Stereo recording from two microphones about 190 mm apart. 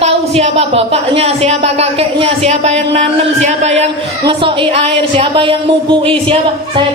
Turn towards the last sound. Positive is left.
turn(degrees=-25)  # may be behind; listen again after turning